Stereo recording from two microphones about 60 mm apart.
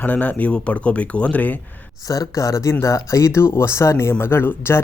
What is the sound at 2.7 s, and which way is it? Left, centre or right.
Speech, left.